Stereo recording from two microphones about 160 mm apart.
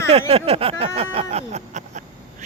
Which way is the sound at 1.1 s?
40° right (ahead or behind).